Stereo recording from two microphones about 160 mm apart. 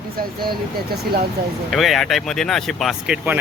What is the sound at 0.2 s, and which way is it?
Speech, 70° right (ahead or behind).